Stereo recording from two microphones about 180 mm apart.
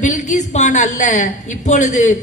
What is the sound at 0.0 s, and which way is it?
A woman's voice, 45° left (ahead or behind).